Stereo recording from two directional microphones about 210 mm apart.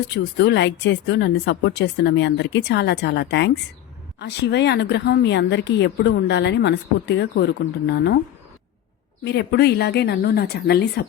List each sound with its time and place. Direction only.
0.3 s a woman's voice: 55° left (ahead or behind)
9.2 s speech: 55° left (ahead or behind)